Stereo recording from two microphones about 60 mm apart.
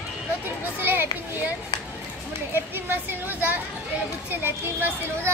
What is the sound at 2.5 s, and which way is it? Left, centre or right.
A child's voice, right.